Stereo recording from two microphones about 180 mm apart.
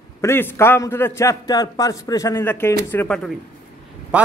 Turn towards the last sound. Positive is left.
turn(degrees=-5)  # may be behind; listen again after turning